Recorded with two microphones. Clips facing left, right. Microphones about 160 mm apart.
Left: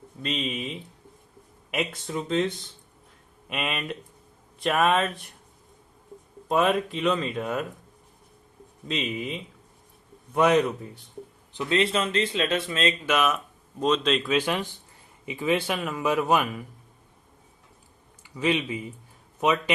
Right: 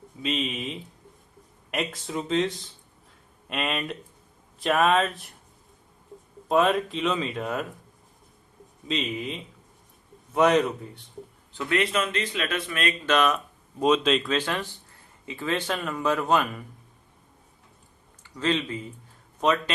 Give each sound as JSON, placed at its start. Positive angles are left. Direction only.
{"t": 0.2, "sound": "speech", "side_deg": 0}
{"t": 6.5, "sound": "speech", "side_deg": 0}
{"t": 8.9, "sound": "speech", "side_deg": 0}
{"t": 11.5, "sound": "a man's voice", "side_deg": 20}
{"t": 13.1, "sound": "speech", "side_deg": 5}
{"t": 13.7, "sound": "speech", "side_deg": -10}
{"t": 14.3, "sound": "speech", "side_deg": 15}
{"t": 18.2, "sound": "speech", "side_deg": 10}